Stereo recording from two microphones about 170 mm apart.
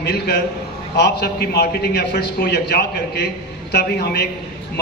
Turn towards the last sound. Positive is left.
turn(degrees=70)  # may be behind; listen again after turning